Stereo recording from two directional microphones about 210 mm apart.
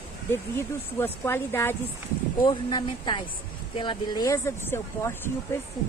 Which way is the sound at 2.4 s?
20° left (ahead or behind).